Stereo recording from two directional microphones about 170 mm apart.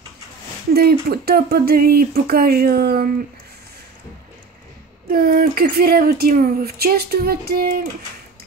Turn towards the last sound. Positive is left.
turn(degrees=-65)  # may be behind; listen again after turning